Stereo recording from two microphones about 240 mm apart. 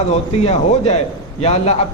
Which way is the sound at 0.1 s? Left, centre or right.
Left.